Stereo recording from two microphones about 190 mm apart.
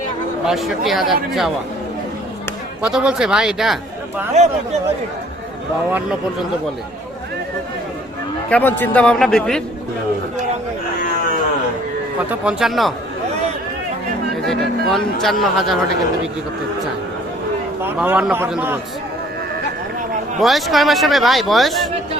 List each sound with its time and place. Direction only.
0.4 s speech: centre (ahead or behind)
2.8 s speech: 5° right (ahead or behind)
4.4 s speech: 35° right (ahead or behind)
8.4 s speech: 10° left (ahead or behind)
12.3 s speech: 5° right (ahead or behind)
14.4 s speech: centre (ahead or behind)
17.8 s a man's voice: 10° right (ahead or behind)
20.4 s speech: centre (ahead or behind)